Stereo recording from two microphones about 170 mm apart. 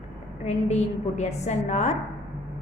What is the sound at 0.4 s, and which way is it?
A woman's voice, 40° left (ahead or behind).